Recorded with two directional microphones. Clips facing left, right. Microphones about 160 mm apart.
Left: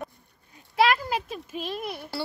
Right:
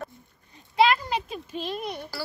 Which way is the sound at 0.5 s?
Centre (ahead or behind).